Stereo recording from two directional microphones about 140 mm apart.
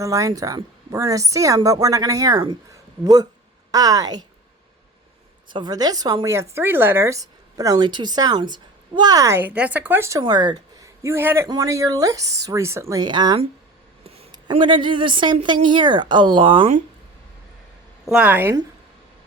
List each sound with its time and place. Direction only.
0.0 s speech: 25° right (ahead or behind)
5.5 s speech: 30° right (ahead or behind)
14.0 s a sound: 45° right (ahead or behind)
14.4 s a woman's voice: 35° right (ahead or behind)
18.0 s a woman's voice: 5° right (ahead or behind)